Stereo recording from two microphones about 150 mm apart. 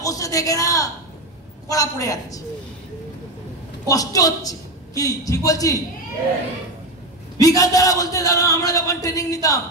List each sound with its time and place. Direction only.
0.0 s a man's voice: 20° left (ahead or behind)
3.8 s a man's voice: 25° left (ahead or behind)
7.3 s a man's voice: 25° left (ahead or behind)